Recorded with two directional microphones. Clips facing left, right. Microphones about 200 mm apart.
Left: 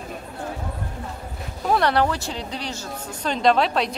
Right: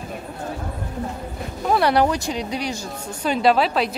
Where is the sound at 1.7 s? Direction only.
10° right (ahead or behind).